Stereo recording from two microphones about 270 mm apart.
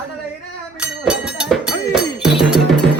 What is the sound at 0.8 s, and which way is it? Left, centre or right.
Music, centre.